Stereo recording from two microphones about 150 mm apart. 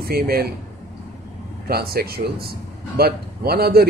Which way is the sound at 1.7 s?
90° right.